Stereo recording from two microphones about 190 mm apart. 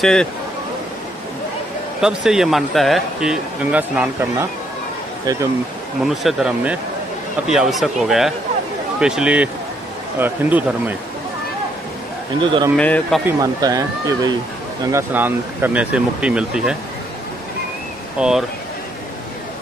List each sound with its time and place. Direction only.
0.0 s speech: 5° left (ahead or behind)
2.0 s speech: 5° right (ahead or behind)
6.0 s speech: 5° right (ahead or behind)
12.4 s speech: 25° right (ahead or behind)
12.7 s speech: 5° left (ahead or behind)
13.2 s speech: 20° right (ahead or behind)
18.2 s speech: 5° right (ahead or behind)